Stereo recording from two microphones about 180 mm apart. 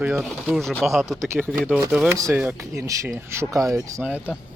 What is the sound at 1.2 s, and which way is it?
Speech, 15° right (ahead or behind).